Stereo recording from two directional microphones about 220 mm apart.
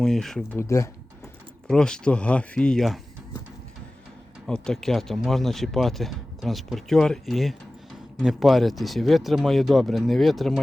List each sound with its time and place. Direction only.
0.0 s speech: centre (ahead or behind)
4.4 s speech: 5° left (ahead or behind)